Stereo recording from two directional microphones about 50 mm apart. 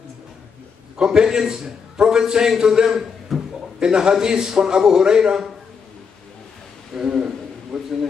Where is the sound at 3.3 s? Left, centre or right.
Centre.